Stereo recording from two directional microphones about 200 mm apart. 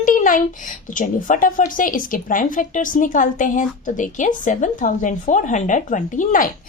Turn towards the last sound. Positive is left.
turn(degrees=40)  # may be behind; listen again after turning